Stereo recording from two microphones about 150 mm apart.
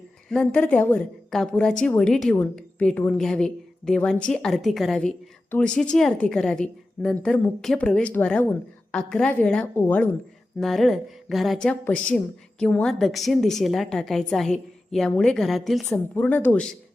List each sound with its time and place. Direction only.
0.3 s a woman's voice: 5° left (ahead or behind)
10.6 s a woman's voice: centre (ahead or behind)